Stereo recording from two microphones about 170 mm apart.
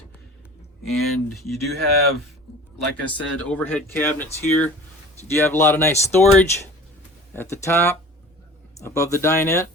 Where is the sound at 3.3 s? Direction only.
10° left (ahead or behind).